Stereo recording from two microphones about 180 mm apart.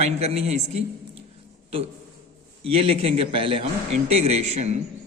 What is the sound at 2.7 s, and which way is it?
A man's voice, 30° right (ahead or behind).